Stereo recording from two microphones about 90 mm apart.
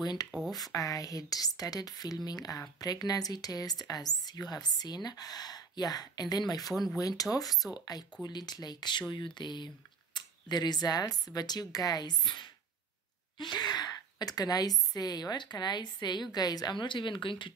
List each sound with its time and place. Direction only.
0.0 s speech: 50° left (ahead or behind)
0.7 s speech: 40° left (ahead or behind); by 17.5 s 65° left (ahead or behind)